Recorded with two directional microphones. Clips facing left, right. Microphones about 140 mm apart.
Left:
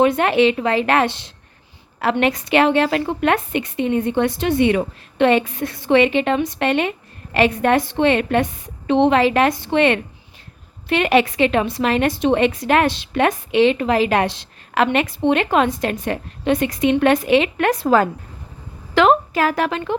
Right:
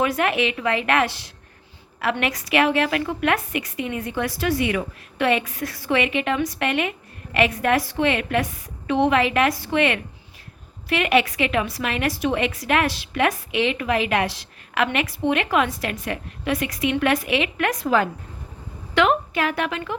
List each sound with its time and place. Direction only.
0.0 s a woman's voice: 30° left (ahead or behind)